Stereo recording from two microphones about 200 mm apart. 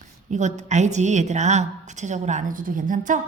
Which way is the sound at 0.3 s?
35° right (ahead or behind).